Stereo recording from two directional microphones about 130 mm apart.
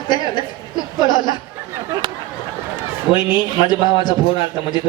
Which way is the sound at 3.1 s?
35° left (ahead or behind).